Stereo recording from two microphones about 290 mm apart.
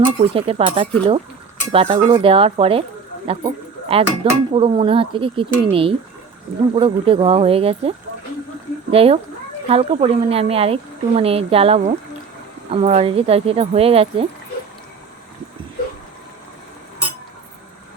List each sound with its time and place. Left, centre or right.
0.2 s speech: centre